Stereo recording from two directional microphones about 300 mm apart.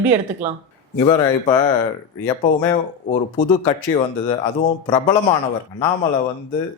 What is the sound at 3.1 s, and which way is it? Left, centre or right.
Speech, centre.